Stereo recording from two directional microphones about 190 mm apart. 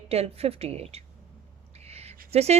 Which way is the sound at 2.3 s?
35° right (ahead or behind).